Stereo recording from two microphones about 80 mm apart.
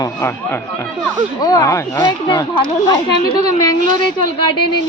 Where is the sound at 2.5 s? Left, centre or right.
Left.